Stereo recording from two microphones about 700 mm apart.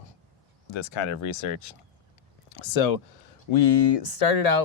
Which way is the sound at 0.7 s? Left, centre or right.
Left.